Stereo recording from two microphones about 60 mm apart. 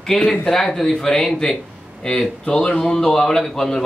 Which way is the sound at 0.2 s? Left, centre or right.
Centre.